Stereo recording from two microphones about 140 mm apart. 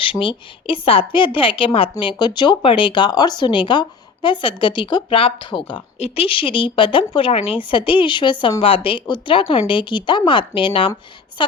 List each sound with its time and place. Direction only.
0.0 s a woman's voice: 40° left (ahead or behind)